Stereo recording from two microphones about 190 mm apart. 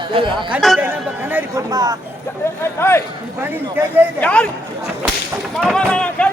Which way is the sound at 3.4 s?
10° right (ahead or behind).